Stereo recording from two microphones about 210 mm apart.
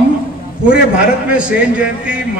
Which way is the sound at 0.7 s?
5° right (ahead or behind).